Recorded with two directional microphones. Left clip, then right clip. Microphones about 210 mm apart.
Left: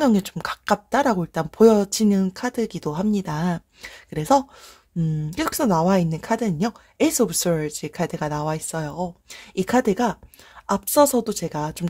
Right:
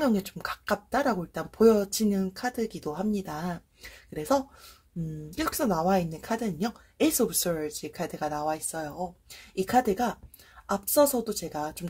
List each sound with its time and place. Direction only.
0.0 s speech: 40° left (ahead or behind)